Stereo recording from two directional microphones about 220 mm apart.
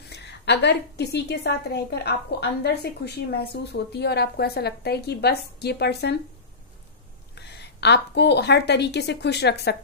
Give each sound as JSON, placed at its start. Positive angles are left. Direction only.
{"t": 0.1, "sound": "a woman's voice", "side_deg": 50}
{"t": 7.3, "sound": "a woman's voice", "side_deg": 50}